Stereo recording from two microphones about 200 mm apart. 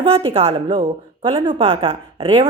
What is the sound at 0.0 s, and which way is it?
A woman's voice, 30° right (ahead or behind).